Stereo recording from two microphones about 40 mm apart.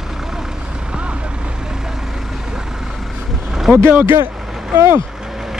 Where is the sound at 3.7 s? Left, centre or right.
Right.